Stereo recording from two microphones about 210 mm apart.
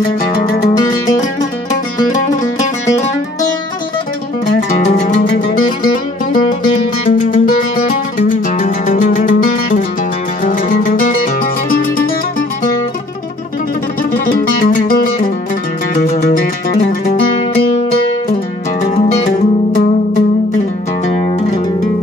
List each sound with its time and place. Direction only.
0.2 s music: 45° left (ahead or behind)
4.7 s music: 35° left (ahead or behind)
14.1 s music: 45° left (ahead or behind)
19.7 s music: 40° left (ahead or behind)